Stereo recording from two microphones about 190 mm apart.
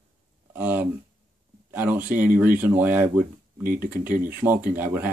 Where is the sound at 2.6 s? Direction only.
10° right (ahead or behind).